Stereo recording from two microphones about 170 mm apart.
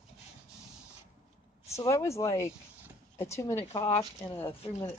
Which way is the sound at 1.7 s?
15° left (ahead or behind).